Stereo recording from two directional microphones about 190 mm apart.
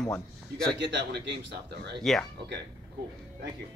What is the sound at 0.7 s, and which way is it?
Speech, 65° right (ahead or behind).